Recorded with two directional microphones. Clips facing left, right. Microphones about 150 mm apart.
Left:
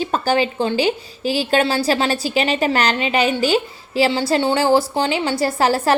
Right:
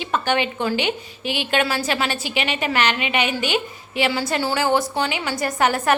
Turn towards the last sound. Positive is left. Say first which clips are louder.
# left 3 dB
turn(degrees=30)  # may be behind; listen again after turning